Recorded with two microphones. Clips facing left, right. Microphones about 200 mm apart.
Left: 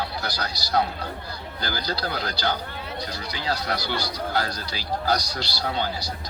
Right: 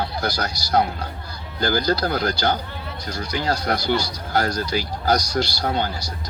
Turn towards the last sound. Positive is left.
turn(degrees=-45)  # may be behind; listen again after turning